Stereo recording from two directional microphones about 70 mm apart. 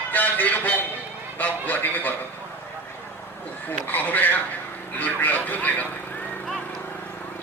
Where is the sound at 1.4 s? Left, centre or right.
Left.